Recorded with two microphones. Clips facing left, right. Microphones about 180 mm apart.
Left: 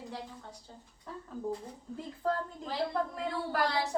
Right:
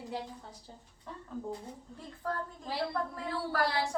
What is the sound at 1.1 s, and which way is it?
Speech, centre (ahead or behind).